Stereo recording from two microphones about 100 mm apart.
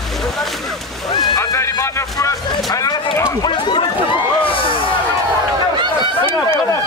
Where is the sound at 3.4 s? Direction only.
50° left (ahead or behind).